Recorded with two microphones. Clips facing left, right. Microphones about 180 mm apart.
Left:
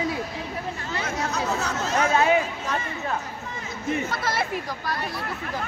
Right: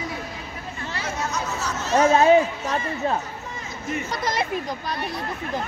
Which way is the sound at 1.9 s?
30° right (ahead or behind).